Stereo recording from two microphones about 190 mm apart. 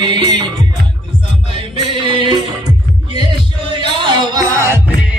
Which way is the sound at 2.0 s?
25° right (ahead or behind).